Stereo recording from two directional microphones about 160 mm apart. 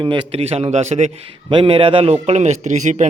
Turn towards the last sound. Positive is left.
turn(degrees=-50)  # may be behind; listen again after turning